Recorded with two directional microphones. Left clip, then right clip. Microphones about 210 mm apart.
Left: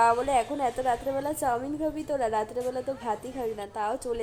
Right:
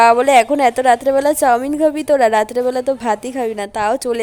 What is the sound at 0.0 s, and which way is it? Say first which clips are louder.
A woman's voice: right 13 dB; 50° right (ahead or behind).